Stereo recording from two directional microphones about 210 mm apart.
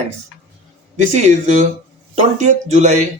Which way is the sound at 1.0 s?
35° right (ahead or behind).